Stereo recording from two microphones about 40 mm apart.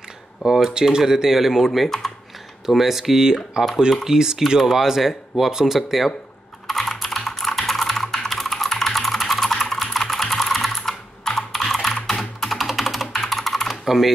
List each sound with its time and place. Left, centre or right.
0.4 s speech: right
0.8 s speech: centre
5.8 s speech: centre
6.7 s computer keyboard: centre
13.1 s typing: centre